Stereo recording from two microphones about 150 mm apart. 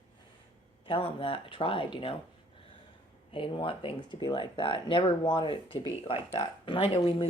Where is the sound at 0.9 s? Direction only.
35° left (ahead or behind).